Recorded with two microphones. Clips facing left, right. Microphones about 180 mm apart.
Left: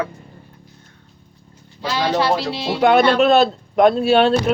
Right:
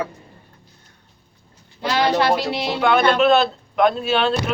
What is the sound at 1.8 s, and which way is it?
Speech, 60° right (ahead or behind).